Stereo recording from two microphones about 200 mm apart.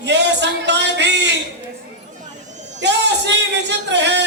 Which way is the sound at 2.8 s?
60° right (ahead or behind).